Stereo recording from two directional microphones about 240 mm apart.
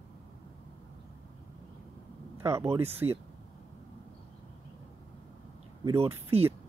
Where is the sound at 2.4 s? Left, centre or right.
Centre.